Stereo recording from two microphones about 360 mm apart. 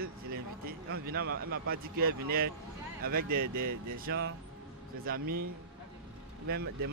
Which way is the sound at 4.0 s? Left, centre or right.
Right.